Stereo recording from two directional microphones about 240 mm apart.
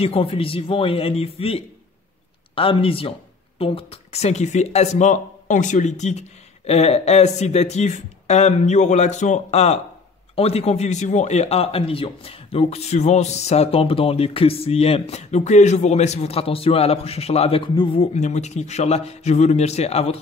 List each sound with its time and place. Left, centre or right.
0.0 s a man's voice: left